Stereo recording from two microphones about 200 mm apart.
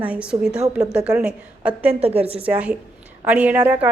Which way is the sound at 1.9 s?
30° right (ahead or behind).